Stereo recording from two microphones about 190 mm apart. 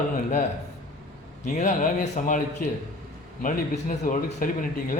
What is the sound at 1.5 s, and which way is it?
A man's voice, 40° left (ahead or behind).